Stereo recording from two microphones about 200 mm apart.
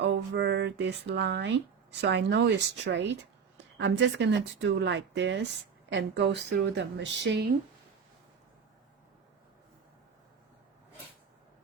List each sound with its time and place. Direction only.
0.0 s speech: 60° right (ahead or behind)